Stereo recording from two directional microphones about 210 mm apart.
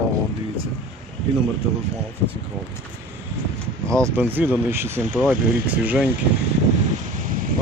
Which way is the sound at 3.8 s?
15° right (ahead or behind).